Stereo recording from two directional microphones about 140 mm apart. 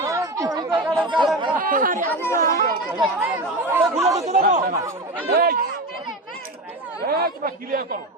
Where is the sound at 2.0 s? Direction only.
15° left (ahead or behind).